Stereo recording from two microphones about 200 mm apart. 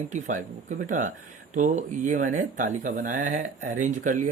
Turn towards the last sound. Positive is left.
turn(degrees=-40)  # may be behind; listen again after turning